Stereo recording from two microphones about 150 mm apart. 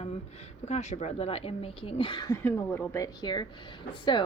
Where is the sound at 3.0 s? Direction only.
30° left (ahead or behind).